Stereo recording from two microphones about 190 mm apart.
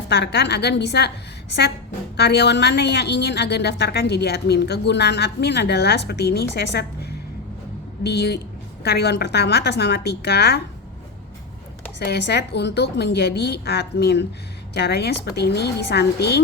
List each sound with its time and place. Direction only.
0.1 s a woman's voice: 60° left (ahead or behind)
11.9 s a woman's voice: 60° left (ahead or behind)